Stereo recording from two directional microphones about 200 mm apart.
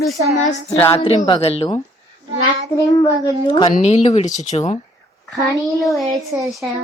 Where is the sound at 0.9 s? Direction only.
25° left (ahead or behind).